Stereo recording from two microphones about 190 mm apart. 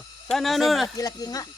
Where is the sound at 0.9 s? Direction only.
20° left (ahead or behind).